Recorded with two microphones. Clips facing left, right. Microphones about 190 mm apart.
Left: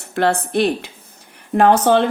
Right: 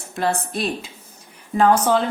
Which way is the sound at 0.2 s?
60° left (ahead or behind).